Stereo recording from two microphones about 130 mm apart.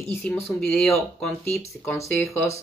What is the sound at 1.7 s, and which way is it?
Speech, 25° left (ahead or behind).